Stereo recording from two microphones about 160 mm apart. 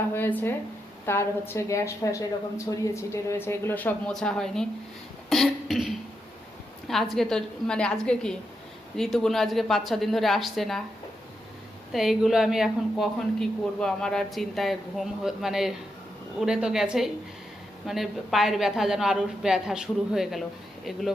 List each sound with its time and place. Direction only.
0.1 s a woman's voice: 10° left (ahead or behind)
5.3 s a sound: centre (ahead or behind)
6.8 s a woman's voice: centre (ahead or behind)
11.9 s a woman's voice: centre (ahead or behind)